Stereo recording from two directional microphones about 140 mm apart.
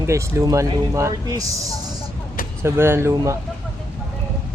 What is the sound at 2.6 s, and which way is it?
Speech, 15° right (ahead or behind).